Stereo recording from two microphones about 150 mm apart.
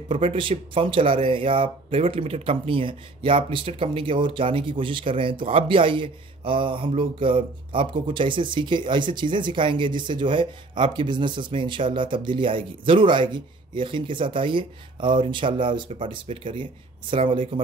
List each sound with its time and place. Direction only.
0.1 s speech: 35° right (ahead or behind)